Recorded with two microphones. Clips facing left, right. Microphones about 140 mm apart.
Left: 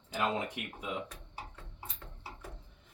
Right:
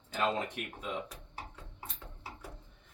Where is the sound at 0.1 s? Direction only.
10° left (ahead or behind).